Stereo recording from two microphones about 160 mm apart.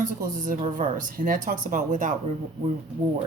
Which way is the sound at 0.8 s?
55° right (ahead or behind).